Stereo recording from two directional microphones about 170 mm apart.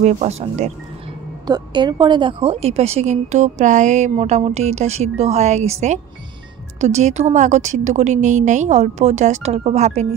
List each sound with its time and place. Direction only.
0.0 s a woman's voice: 40° right (ahead or behind)
1.5 s a woman's voice: 25° right (ahead or behind)